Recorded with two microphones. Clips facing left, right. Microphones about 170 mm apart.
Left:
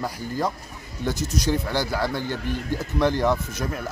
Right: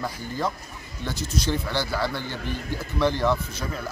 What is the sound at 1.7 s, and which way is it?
Speech, 45° left (ahead or behind).